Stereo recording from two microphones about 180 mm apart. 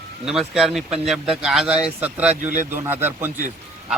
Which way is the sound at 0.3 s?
5° right (ahead or behind).